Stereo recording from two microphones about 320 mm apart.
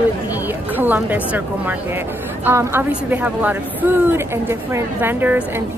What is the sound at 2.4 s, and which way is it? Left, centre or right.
A woman's voice, centre.